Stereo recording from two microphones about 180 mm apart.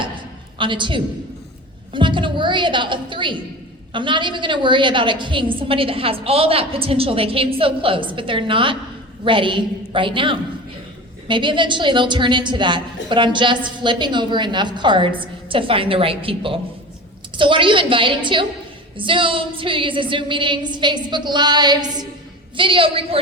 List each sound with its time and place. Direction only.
0.6 s a woman's voice: 25° right (ahead or behind)